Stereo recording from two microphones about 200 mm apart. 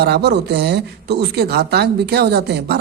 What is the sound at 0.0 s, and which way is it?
Speech, 55° right (ahead or behind).